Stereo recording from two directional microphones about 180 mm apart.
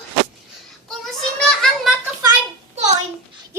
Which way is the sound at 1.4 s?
5° left (ahead or behind).